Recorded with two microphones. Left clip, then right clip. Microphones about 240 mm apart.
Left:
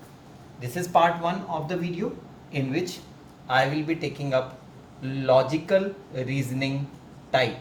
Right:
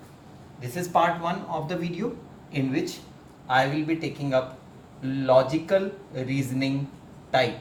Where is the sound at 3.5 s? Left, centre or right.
Left.